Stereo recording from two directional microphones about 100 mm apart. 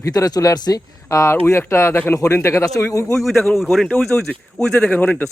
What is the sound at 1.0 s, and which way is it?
Speech, 30° left (ahead or behind).